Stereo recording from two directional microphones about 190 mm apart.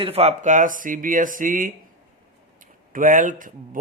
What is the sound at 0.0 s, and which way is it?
Speech, 35° right (ahead or behind).